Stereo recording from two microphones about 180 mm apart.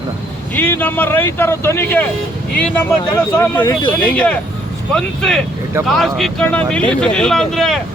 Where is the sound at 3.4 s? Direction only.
25° left (ahead or behind).